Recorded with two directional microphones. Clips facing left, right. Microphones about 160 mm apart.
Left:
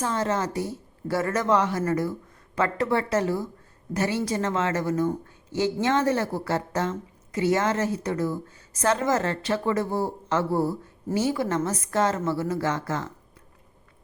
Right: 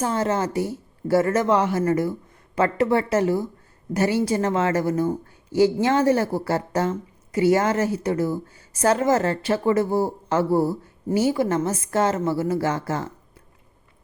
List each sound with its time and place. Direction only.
0.0 s a woman's voice: 30° right (ahead or behind)